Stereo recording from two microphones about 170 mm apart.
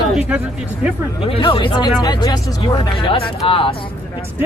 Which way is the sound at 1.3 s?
30° left (ahead or behind).